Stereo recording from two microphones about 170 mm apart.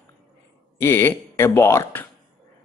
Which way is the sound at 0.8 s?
15° left (ahead or behind).